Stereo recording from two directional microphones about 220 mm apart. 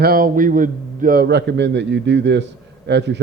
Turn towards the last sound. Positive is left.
turn(degrees=-50)  # may be behind; listen again after turning